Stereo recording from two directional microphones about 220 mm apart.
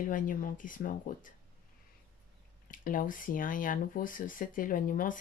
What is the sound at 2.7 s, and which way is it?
Speech, 40° left (ahead or behind).